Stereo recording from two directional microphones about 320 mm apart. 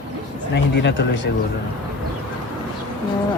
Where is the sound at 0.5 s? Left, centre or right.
Left.